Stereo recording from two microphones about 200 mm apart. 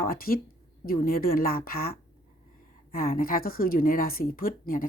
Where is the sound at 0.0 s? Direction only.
50° left (ahead or behind).